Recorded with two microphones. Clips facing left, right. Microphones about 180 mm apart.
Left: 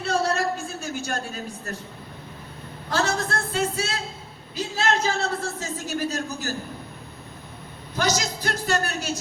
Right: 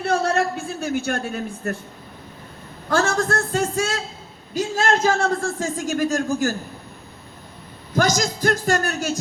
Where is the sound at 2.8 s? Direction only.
45° right (ahead or behind).